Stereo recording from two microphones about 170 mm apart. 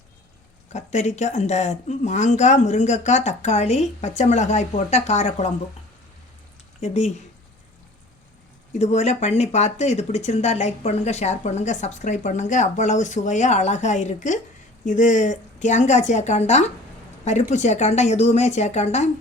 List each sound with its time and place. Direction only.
0.7 s speech: 45° left (ahead or behind)
6.7 s speech: 40° left (ahead or behind)
8.8 s speech: 40° left (ahead or behind)